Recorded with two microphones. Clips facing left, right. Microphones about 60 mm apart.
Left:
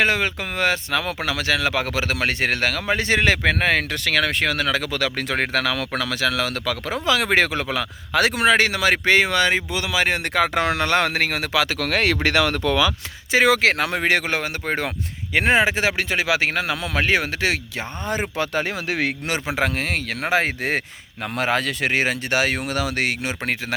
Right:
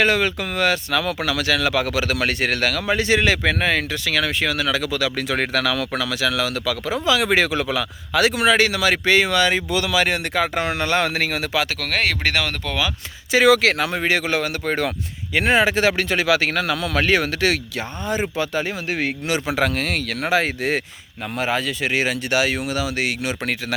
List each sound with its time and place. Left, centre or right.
0.0 s speech: left
9.6 s speech: left
10.2 s speech: left
13.3 s speech: left
13.8 s speech: left
14.3 s speech: left
15.5 s speech: centre
18.0 s speech: left
19.5 s speech: left
21.3 s speech: left